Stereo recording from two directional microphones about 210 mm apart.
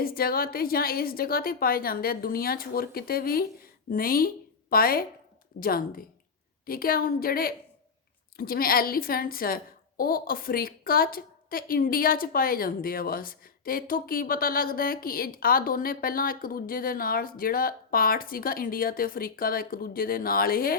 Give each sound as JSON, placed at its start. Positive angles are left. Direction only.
{"t": 0.0, "sound": "a woman's voice", "side_deg": 45}